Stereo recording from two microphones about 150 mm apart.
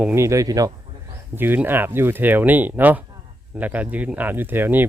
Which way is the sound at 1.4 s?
15° right (ahead or behind).